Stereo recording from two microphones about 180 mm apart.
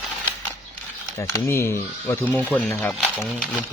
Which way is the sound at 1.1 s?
15° left (ahead or behind).